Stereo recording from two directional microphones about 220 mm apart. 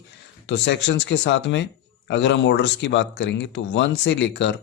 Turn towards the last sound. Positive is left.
turn(degrees=55)  # may be behind; listen again after turning